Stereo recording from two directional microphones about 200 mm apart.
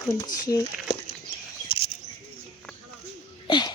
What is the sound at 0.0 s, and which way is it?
Speech, 15° left (ahead or behind).